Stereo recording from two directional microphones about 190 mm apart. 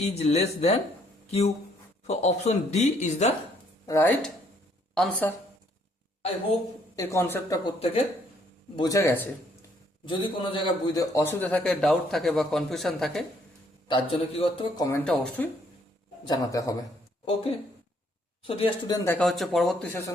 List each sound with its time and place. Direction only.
0.1 s speech: 35° left (ahead or behind)
3.8 s a man's voice: 15° left (ahead or behind)
6.9 s a man's voice: 15° left (ahead or behind)
8.7 s a man's voice: 20° left (ahead or behind)
10.1 s a man's voice: 25° left (ahead or behind); by 13.2 s centre (ahead or behind)
13.8 s a man's voice: 25° left (ahead or behind)
14.8 s a man's voice: 15° left (ahead or behind)
16.2 s a man's voice: 20° left (ahead or behind)
17.2 s a man's voice: 30° left (ahead or behind)
18.9 s speech: 10° left (ahead or behind)